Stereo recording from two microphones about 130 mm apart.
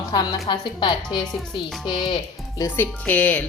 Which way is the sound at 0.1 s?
35° left (ahead or behind).